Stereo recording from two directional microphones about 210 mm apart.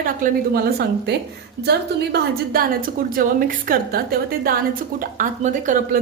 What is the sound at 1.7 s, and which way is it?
A woman's voice, 50° right (ahead or behind).